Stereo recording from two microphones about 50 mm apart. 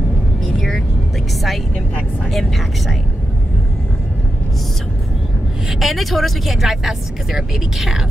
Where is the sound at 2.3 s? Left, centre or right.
Centre.